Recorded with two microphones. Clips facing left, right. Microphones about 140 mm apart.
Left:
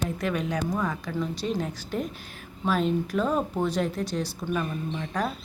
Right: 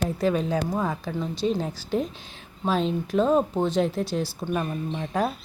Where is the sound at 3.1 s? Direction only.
30° right (ahead or behind).